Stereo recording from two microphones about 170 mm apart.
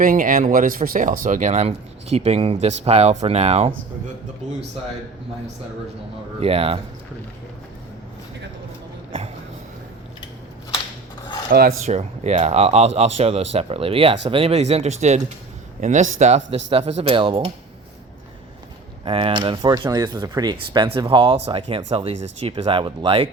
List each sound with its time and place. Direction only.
0.0 s speech: 55° right (ahead or behind); by 3.7 s 40° right (ahead or behind)
6.4 s speech: 35° right (ahead or behind)
11.5 s speech: 60° right (ahead or behind)
11.9 s a man's voice: 40° right (ahead or behind)
19.0 s speech: 30° right (ahead or behind)